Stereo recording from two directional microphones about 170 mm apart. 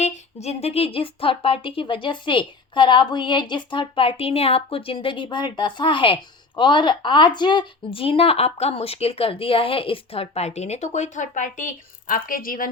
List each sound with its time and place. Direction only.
0.0 s speech: 40° left (ahead or behind); by 12.7 s 55° left (ahead or behind)